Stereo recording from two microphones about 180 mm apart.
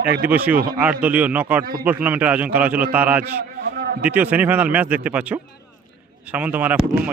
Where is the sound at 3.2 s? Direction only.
65° right (ahead or behind).